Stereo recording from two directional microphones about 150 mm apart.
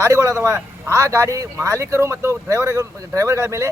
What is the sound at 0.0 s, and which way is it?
Speech, 20° right (ahead or behind).